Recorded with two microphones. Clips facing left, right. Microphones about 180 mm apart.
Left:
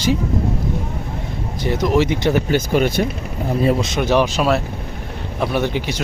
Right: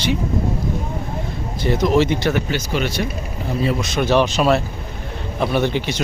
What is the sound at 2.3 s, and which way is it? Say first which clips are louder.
Speech: left 5 dB; 50° left (ahead or behind).